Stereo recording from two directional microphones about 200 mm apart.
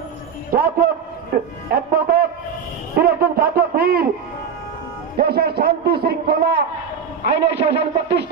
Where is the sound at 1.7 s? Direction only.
50° right (ahead or behind).